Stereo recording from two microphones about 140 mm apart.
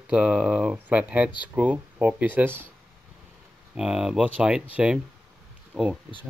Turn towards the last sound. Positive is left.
turn(degrees=0)  # may be behind; listen again after turning